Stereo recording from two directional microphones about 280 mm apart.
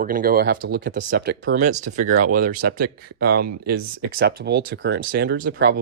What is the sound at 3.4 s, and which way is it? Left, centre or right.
Speech, right.